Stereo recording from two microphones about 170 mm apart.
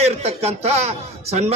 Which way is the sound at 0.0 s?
40° right (ahead or behind).